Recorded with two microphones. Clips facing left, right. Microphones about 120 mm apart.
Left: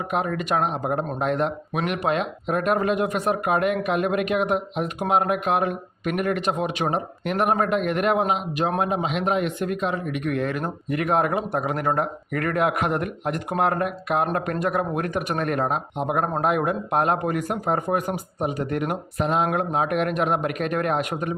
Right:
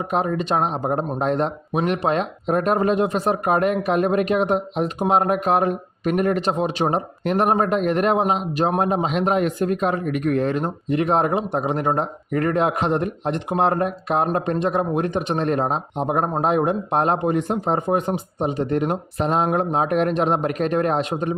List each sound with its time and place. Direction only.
0.1 s a man's voice: 30° right (ahead or behind)